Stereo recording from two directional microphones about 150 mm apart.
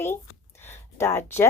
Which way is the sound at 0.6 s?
15° left (ahead or behind).